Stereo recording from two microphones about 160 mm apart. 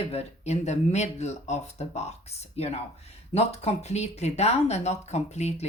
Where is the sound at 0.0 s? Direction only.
40° left (ahead or behind).